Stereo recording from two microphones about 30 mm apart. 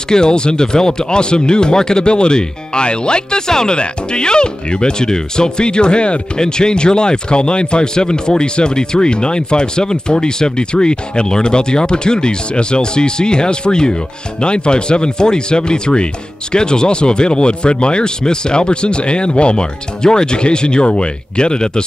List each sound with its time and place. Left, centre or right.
0.1 s speech: left
6.4 s speech: left